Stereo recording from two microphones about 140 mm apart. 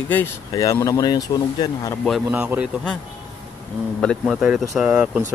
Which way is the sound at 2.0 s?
5° right (ahead or behind).